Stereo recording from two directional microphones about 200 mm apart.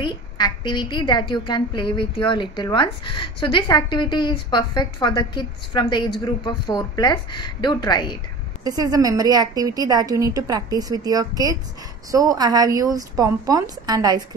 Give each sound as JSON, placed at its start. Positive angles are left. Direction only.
{"t": 0.0, "sound": "a woman's voice", "side_deg": 20}
{"t": 8.6, "sound": "a woman's voice", "side_deg": -20}